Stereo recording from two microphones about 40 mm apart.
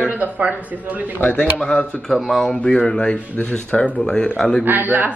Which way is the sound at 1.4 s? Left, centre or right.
Left.